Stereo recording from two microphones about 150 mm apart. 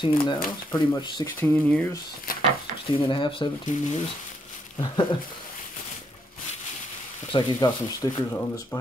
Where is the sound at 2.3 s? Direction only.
70° left (ahead or behind).